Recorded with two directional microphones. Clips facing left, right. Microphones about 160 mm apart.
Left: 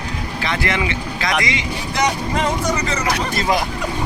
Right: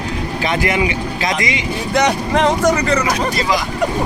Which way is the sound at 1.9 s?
80° right.